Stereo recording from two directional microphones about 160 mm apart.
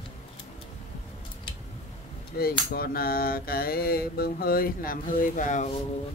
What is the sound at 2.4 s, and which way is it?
Mantra, 70° left (ahead or behind).